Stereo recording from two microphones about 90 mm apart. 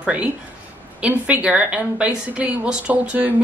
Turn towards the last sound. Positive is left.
turn(degrees=-15)  # may be behind; listen again after turning